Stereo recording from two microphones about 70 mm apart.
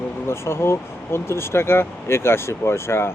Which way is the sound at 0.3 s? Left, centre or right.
Left.